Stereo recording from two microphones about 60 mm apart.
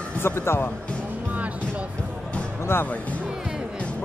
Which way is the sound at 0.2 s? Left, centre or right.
Left.